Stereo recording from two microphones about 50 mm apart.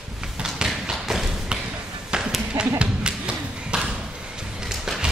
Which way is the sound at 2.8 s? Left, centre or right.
Centre.